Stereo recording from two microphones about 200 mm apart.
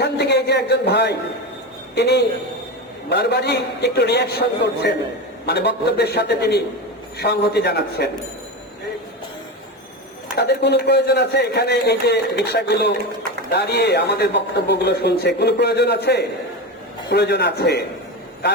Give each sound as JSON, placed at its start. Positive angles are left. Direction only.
{"t": 0.0, "sound": "a sound", "side_deg": 55}
{"t": 2.0, "sound": "speech", "side_deg": 55}
{"t": 10.3, "sound": "speech", "side_deg": 55}